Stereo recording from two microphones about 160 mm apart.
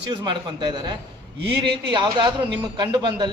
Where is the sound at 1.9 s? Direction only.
30° right (ahead or behind).